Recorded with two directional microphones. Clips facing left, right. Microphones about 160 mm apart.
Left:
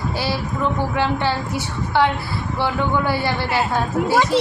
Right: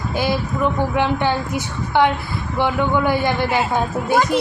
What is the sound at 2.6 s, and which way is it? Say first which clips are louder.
A woman's voice: right 3 dB; 15° right (ahead or behind).